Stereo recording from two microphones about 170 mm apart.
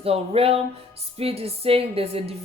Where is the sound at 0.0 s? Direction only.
35° right (ahead or behind).